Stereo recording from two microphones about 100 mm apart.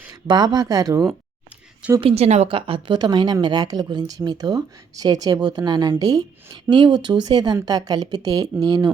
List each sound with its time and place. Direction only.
0.1 s speech: 45° right (ahead or behind)
2.0 s a woman's voice: 80° right; by 6.2 s 40° right (ahead or behind)
6.5 s speech: 50° right (ahead or behind)